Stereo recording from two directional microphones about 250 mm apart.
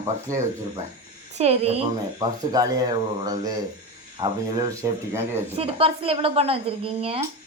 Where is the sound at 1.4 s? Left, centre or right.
Right.